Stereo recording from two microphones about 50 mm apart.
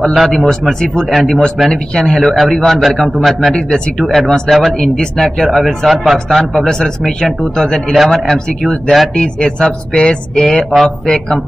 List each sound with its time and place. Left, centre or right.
0.1 s speech: centre
0.5 s speech: centre
3.5 s speech: centre
4.1 s speech: centre
9.1 s speech: centre